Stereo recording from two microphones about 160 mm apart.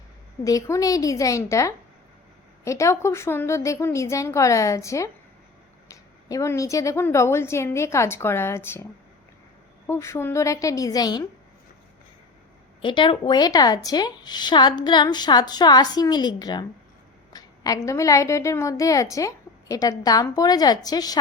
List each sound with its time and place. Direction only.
0.4 s a woman's voice: 20° left (ahead or behind)
9.8 s a woman's voice: 15° left (ahead or behind)
12.8 s a woman's voice: 30° left (ahead or behind)